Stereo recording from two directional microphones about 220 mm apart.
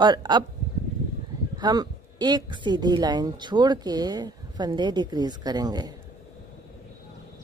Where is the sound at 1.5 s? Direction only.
20° right (ahead or behind).